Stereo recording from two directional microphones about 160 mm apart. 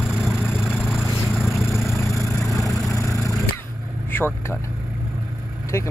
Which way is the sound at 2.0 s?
20° left (ahead or behind).